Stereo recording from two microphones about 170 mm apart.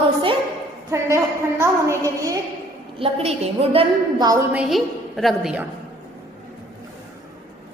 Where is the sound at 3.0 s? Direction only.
35° right (ahead or behind).